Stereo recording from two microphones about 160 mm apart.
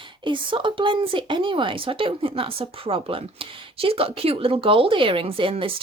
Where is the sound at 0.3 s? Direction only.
30° right (ahead or behind).